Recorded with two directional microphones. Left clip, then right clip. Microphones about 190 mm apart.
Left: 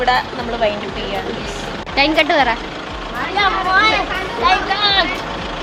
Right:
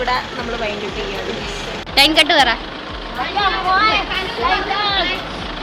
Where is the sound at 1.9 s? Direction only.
5° left (ahead or behind).